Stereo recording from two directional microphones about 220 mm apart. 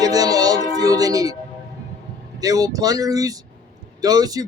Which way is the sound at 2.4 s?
15° right (ahead or behind).